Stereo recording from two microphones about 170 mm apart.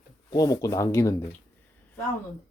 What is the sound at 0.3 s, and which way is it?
Speech, 20° left (ahead or behind).